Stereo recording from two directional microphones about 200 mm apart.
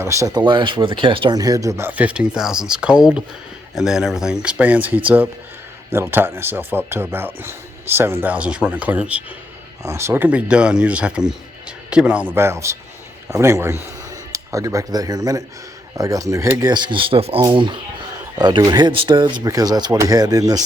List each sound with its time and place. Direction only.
0.0 s speech: 15° right (ahead or behind)